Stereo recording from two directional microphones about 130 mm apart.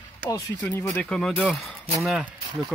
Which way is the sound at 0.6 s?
10° left (ahead or behind).